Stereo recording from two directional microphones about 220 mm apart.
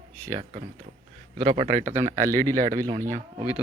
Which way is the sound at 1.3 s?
30° right (ahead or behind).